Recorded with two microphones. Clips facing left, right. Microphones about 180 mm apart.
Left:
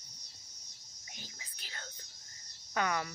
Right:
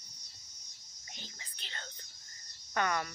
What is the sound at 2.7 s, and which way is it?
Speech, 10° left (ahead or behind).